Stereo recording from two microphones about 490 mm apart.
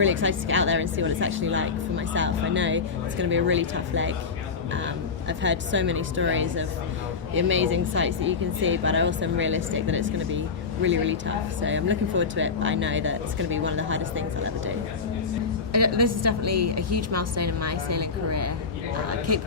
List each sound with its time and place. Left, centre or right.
0.0 s a woman's voice: right
5.3 s a woman's voice: right
15.7 s a woman's voice: right